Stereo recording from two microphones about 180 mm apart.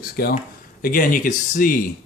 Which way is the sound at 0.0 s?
60° left (ahead or behind).